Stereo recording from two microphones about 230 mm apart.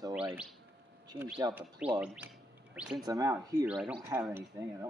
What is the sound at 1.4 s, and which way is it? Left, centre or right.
Speech, centre.